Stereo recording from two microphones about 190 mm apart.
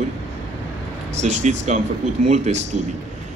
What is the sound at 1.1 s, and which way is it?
A man's voice, 35° right (ahead or behind).